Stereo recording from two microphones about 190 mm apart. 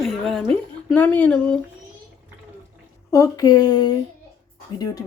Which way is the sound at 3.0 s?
15° left (ahead or behind).